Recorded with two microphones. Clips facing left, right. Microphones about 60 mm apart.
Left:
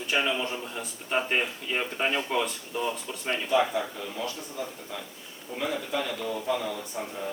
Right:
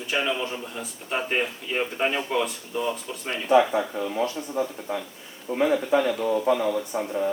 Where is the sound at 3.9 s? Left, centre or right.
Right.